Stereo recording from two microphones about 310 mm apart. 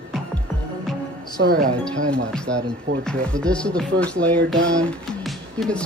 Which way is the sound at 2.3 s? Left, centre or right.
Centre.